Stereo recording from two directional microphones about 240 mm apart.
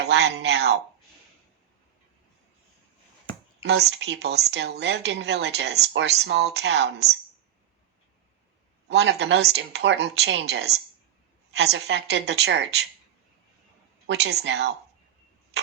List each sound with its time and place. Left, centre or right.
0.0 s speech: right
3.6 s speech: right
8.9 s speech: right
14.1 s speech: right